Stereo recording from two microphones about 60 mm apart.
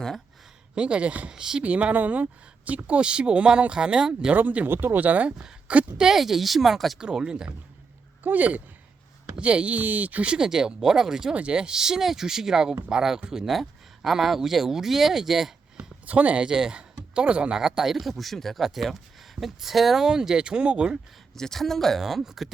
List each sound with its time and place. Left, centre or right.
0.8 s speech: centre
1.6 s speech: right
4.4 s speech: right
5.4 s a woman's voice: centre
7.0 s speech: centre
8.2 s speech: right
10.3 s speech: centre
15.8 s speech: right
17.6 s speech: centre
21.3 s speech: centre
22.0 s speech: centre